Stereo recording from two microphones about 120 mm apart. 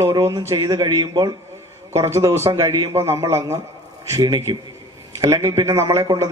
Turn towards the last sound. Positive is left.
turn(degrees=-25)  # may be behind; listen again after turning